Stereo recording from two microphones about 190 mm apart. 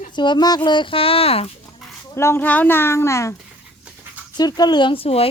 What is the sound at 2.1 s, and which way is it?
A child's voice, 15° left (ahead or behind).